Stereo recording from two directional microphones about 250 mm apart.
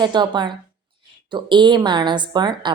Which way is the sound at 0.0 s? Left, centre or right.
Centre.